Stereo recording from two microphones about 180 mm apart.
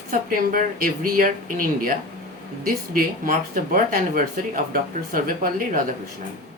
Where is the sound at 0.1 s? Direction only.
50° right (ahead or behind).